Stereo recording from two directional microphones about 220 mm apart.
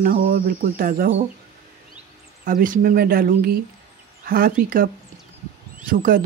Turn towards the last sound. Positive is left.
turn(degrees=-40)  # may be behind; listen again after turning